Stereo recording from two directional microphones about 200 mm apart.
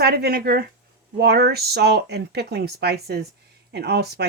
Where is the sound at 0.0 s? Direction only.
55° right (ahead or behind).